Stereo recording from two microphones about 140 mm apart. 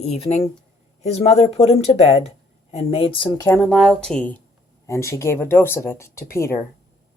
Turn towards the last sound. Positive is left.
turn(degrees=20)  # may be behind; listen again after turning